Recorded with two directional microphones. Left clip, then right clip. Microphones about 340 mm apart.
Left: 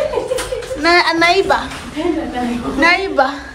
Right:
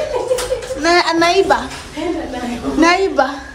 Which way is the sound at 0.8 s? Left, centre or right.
Centre.